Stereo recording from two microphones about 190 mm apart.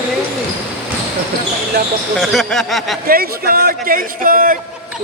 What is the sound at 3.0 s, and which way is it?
Speech, 50° right (ahead or behind).